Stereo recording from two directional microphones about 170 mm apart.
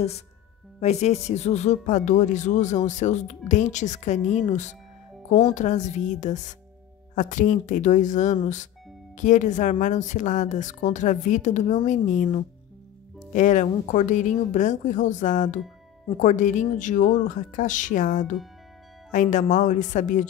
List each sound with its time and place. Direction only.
0.7 s speech: 40° left (ahead or behind)